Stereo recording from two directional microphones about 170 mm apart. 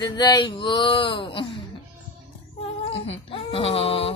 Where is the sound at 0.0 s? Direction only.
25° left (ahead or behind).